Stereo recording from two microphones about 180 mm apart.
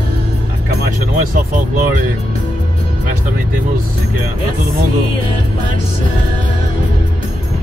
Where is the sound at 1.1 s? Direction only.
50° right (ahead or behind).